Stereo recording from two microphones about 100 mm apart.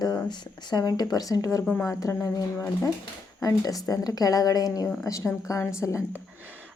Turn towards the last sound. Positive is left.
turn(degrees=30)  # may be behind; listen again after turning